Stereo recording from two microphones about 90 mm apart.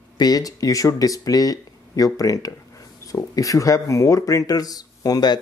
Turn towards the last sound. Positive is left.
turn(degrees=45)  # may be behind; listen again after turning